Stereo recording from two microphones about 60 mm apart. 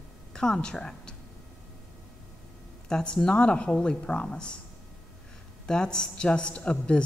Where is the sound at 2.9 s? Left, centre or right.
Centre.